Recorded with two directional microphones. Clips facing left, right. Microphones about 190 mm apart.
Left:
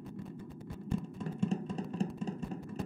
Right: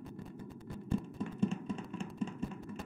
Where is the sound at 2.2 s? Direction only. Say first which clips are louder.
Left 2 dB; 35° left (ahead or behind).